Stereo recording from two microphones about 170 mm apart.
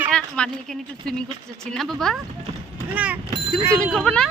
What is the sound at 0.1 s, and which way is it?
A woman's voice, 5° left (ahead or behind).